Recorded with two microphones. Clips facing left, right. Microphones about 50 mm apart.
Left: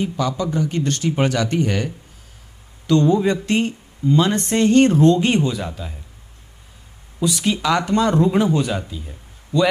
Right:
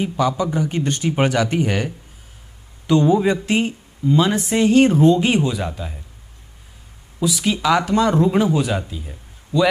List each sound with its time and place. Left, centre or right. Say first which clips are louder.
0.0 s speech: right 2 dB; centre
7.2 s speech: even; centre